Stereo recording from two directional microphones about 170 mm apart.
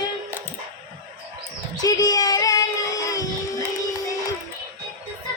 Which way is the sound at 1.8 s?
20° left (ahead or behind).